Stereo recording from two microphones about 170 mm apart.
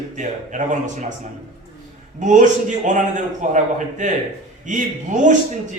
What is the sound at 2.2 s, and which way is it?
A man's voice, 45° right (ahead or behind).